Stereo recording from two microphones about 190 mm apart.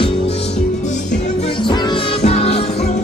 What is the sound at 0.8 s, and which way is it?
Music, 40° left (ahead or behind).